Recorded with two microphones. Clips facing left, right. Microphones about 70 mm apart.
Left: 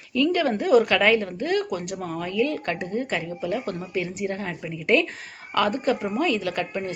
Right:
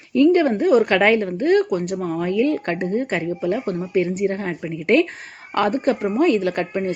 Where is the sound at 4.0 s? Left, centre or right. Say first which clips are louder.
Right 8 dB; right.